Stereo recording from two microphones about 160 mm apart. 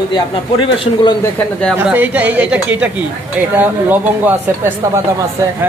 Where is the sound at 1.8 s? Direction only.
10° right (ahead or behind).